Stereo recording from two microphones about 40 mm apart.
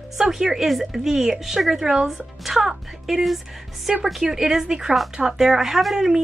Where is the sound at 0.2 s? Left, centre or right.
Centre.